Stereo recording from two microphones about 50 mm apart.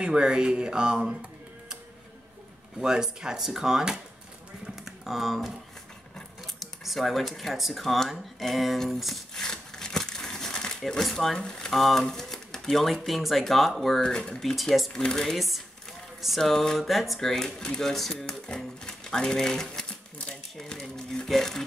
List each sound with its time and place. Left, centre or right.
0.0 s speech: centre
2.8 s speech: centre
4.6 s typing: centre
6.6 s speech: centre
11.3 s speech: centre
15.3 s speech: centre
18.3 s typewriter: centre
20.9 s a sound: centre